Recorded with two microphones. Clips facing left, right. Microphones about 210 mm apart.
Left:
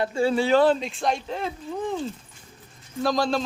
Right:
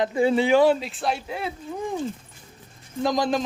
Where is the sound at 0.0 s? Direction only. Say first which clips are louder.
Right 2 dB; 20° right (ahead or behind).